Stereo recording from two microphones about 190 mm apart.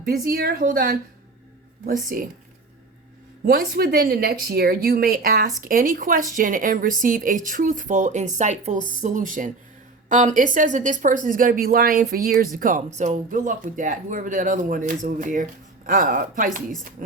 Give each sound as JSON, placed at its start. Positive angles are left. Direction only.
{"t": 0.0, "sound": "speech", "side_deg": -50}
{"t": 3.4, "sound": "speech", "side_deg": -55}